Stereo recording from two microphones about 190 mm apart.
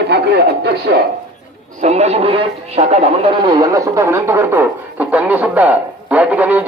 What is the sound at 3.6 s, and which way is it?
Speech, 15° right (ahead or behind).